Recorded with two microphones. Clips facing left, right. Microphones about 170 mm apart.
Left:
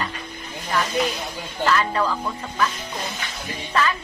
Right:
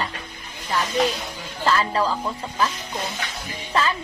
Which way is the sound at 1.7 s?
30° right (ahead or behind).